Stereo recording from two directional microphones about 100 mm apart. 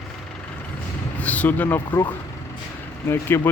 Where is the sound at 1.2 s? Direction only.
15° left (ahead or behind).